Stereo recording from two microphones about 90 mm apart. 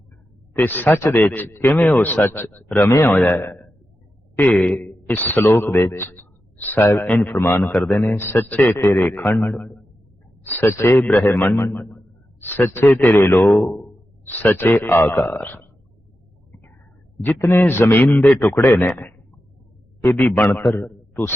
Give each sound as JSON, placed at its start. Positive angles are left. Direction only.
{"t": 0.5, "sound": "a man's voice", "side_deg": 20}
{"t": 1.2, "sound": "a man's voice", "side_deg": 20}
{"t": 4.4, "sound": "a man's voice", "side_deg": 10}
{"t": 11.0, "sound": "a man's voice", "side_deg": 20}
{"t": 17.2, "sound": "a man's voice", "side_deg": 25}